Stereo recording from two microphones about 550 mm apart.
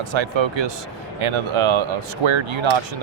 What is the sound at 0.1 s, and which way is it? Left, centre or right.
Speech, right.